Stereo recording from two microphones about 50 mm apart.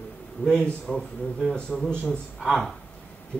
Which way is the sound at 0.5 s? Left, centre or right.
Centre.